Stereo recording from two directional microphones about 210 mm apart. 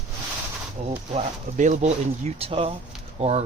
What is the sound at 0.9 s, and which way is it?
Speech, 35° right (ahead or behind).